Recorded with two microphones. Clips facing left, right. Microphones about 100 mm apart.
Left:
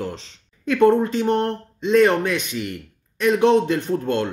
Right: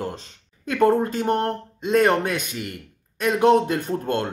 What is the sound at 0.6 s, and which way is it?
Speech, 40° right (ahead or behind).